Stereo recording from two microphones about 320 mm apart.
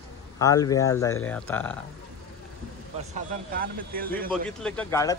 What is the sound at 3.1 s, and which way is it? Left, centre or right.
Speech, right.